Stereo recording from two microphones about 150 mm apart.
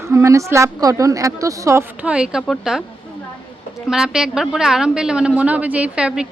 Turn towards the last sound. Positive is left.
turn(degrees=-5)  # may be behind; listen again after turning